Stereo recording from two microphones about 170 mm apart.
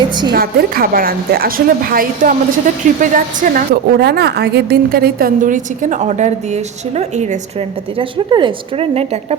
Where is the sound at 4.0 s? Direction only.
75° right (ahead or behind); by 9.4 s 40° right (ahead or behind).